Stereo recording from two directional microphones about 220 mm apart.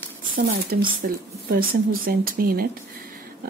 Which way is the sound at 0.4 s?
40° right (ahead or behind).